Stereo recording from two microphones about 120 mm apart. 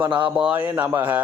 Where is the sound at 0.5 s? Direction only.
15° right (ahead or behind).